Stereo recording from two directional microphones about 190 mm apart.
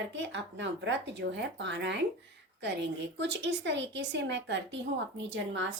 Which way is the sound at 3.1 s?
65° right (ahead or behind).